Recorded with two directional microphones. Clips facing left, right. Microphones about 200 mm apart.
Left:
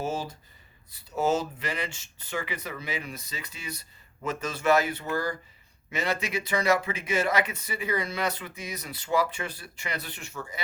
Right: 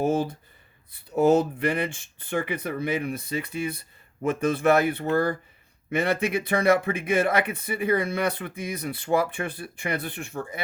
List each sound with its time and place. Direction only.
0.0 s speech: 55° right (ahead or behind)